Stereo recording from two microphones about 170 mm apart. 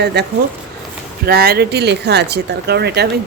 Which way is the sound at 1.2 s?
65° right (ahead or behind).